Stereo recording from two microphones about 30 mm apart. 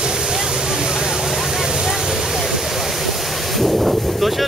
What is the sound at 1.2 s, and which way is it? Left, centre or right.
Vehicle, centre.